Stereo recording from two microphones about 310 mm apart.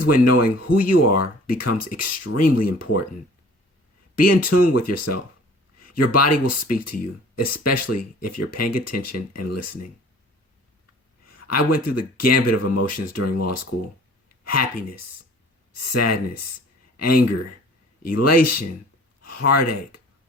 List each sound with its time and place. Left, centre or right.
0.0 s speech: left
4.1 s speech: left
11.3 s speech: left